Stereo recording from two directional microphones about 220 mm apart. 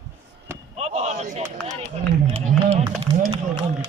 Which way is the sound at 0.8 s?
30° right (ahead or behind).